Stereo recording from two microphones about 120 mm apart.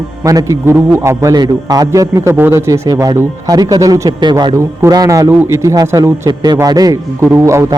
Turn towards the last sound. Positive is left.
turn(degrees=-25)  # may be behind; listen again after turning